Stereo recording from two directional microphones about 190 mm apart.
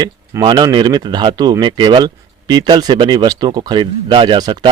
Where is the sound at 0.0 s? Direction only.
20° right (ahead or behind).